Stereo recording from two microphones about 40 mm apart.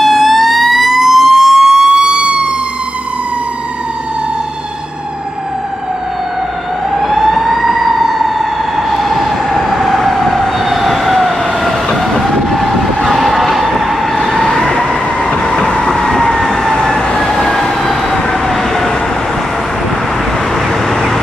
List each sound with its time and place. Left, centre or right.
0.0 s fire engine: centre; by 2.5 s right
6.9 s fire engine: centre
12.2 s emergency vehicle: centre
13.1 s vehicle: centre
14.4 s vehicle: centre
14.9 s train: centre
15.9 s vehicle: centre
20.9 s vehicle: centre